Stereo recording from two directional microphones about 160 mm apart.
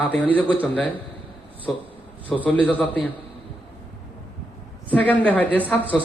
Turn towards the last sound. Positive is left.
turn(degrees=10)  # may be behind; listen again after turning